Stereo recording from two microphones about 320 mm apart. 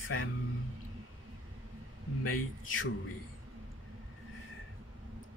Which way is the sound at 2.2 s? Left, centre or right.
Left.